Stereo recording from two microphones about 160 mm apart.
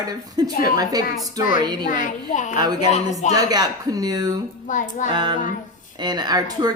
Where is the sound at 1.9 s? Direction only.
50° left (ahead or behind).